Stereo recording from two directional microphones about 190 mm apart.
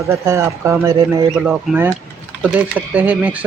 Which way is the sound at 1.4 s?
5° right (ahead or behind).